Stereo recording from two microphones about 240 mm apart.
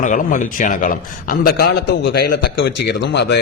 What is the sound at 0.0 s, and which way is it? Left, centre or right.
A man's voice, left.